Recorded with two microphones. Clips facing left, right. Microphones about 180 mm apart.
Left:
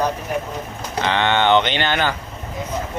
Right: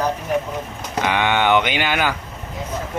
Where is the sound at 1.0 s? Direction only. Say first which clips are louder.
Left 1 dB; 10° right (ahead or behind).